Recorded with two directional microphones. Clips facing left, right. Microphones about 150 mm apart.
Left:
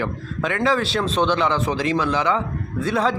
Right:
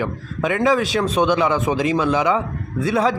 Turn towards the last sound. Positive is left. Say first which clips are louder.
# right 2 dB
turn(degrees=-10)  # may be behind; listen again after turning